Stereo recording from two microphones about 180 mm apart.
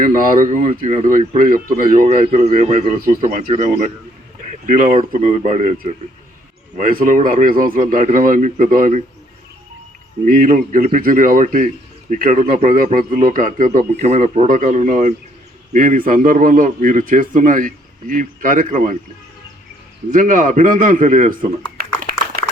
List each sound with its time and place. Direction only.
0.0 s a man's voice: 50° right (ahead or behind)
10.2 s a man's voice: 50° right (ahead or behind)
20.1 s a man's voice: 45° right (ahead or behind)
21.8 s a sound: 55° right (ahead or behind)